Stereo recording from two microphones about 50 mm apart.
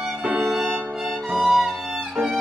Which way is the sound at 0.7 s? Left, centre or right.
Centre.